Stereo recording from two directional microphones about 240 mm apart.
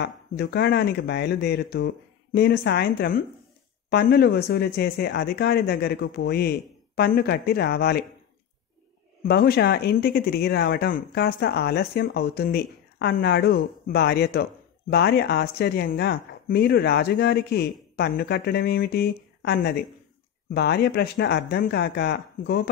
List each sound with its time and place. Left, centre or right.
0.0 s speech: left
9.2 s speech: left